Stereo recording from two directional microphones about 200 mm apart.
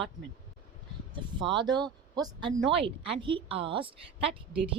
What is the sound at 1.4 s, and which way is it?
Speech, 25° right (ahead or behind).